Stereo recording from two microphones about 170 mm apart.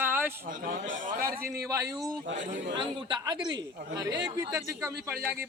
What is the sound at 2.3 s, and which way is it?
Speech, 50° right (ahead or behind).